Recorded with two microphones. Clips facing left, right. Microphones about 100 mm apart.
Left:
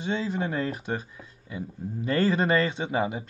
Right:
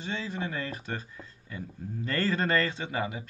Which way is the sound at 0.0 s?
20° left (ahead or behind).